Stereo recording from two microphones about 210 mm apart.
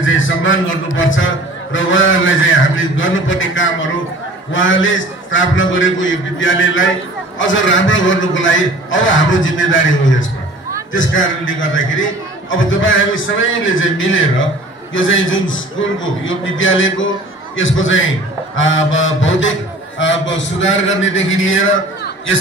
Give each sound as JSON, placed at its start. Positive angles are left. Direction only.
{"t": 0.0, "sound": "a man's voice", "side_deg": 65}